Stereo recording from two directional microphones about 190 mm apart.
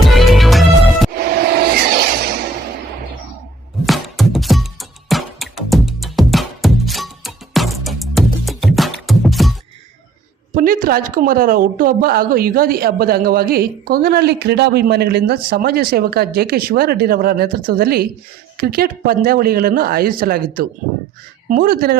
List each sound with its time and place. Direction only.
0.0 s music: centre (ahead or behind)
1.1 s a sound: 55° right (ahead or behind)
3.8 s music: centre (ahead or behind)
10.5 s speech: 45° right (ahead or behind)